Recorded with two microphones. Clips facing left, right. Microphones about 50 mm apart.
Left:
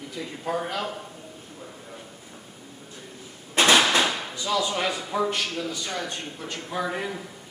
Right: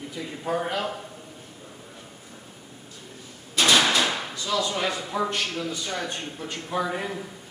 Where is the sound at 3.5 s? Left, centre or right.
Left.